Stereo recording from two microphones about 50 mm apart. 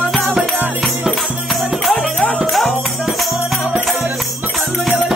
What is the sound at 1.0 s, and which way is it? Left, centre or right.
Music, centre.